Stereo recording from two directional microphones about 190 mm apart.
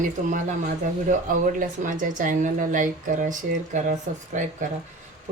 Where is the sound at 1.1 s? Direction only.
45° right (ahead or behind).